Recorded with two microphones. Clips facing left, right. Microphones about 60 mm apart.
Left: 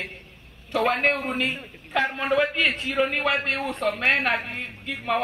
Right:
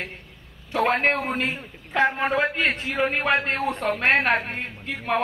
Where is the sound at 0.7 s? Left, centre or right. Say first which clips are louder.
Right 1 dB; right.